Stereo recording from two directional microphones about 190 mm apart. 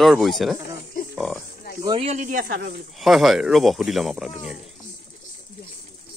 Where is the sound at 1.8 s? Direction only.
30° right (ahead or behind); by 2.7 s 50° right (ahead or behind).